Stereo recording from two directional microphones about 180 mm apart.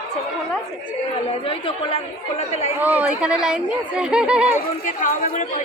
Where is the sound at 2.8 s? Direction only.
10° right (ahead or behind).